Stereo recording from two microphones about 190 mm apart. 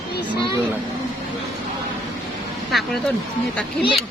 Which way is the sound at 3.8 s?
30° left (ahead or behind).